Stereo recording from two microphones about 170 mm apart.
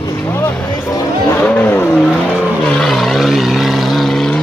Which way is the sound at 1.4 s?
10° left (ahead or behind).